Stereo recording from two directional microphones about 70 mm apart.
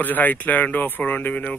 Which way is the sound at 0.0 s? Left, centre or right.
Left.